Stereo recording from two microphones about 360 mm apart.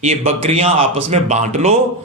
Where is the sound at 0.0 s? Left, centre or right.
Centre.